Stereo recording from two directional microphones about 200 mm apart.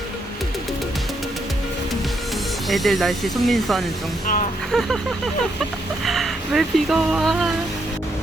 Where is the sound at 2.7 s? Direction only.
Centre (ahead or behind).